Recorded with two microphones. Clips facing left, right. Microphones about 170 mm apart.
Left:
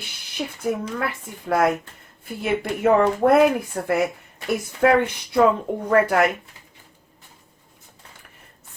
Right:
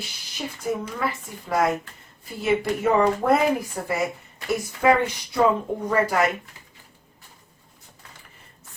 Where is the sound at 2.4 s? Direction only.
60° left (ahead or behind).